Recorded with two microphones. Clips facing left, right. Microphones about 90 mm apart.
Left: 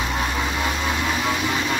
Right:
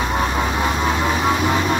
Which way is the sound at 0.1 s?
35° right (ahead or behind).